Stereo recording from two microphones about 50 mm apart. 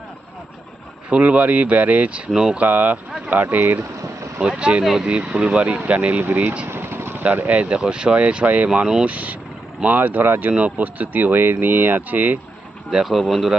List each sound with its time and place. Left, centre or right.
1.1 s speech: right
2.3 s speech: centre
2.6 s speech: right
3.4 s speech: right
4.4 s speech: right
4.8 s speech: centre
5.0 s speech: right
6.2 s speech: right
6.7 s vehicle: right
7.5 s speech: right
8.7 s speech: centre
9.0 s speech: right
10.8 s speech: right
13.1 s speech: centre